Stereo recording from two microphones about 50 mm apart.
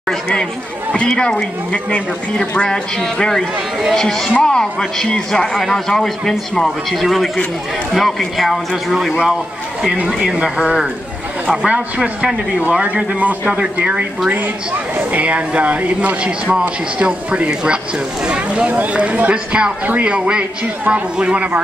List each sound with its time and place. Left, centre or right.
0.1 s speech: centre; by 21.5 s right